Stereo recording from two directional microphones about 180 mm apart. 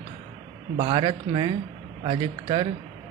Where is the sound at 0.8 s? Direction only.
25° right (ahead or behind).